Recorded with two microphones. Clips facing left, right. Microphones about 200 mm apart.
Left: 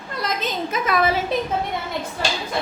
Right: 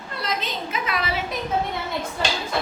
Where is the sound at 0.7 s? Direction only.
45° left (ahead or behind).